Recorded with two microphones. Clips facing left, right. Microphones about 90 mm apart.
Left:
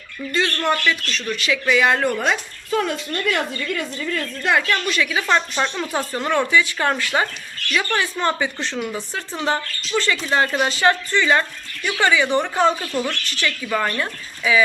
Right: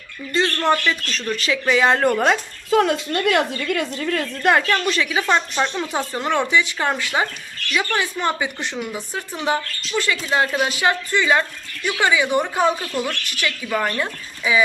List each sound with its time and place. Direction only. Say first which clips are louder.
0.3 s speech: right 2 dB; 30° right (ahead or behind)
2.0 s a woman's voice: right 3 dB; 45° right (ahead or behind)
2.6 s speech: right 5 dB; 75° right (ahead or behind)
3.9 s a woman's voice: right 2 dB; 50° right (ahead or behind)
4.7 s speech: right 1 dB; 30° right (ahead or behind)
5.7 s speech: even; 15° right (ahead or behind)